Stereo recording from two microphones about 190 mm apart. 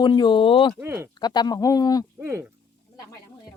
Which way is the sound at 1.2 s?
20° left (ahead or behind).